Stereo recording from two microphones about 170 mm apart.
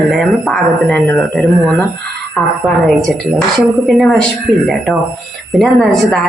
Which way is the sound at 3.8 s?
Centre (ahead or behind).